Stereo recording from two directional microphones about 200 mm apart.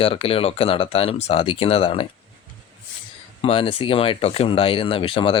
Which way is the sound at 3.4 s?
30° left (ahead or behind).